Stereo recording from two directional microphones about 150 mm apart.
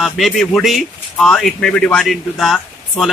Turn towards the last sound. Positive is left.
turn(degrees=0)  # may be behind; listen again after turning